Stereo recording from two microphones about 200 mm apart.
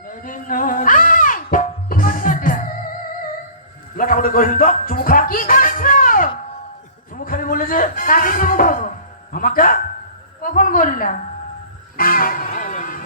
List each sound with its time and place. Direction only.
0.1 s music: 45° left (ahead or behind)
3.9 s music: 45° left (ahead or behind)
7.2 s a sound: 45° left (ahead or behind)
9.3 s a woman's voice: 45° left (ahead or behind)
11.9 s music: 45° left (ahead or behind)